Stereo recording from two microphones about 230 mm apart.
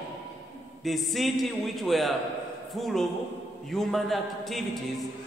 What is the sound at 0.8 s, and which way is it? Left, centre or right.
A man's voice, centre.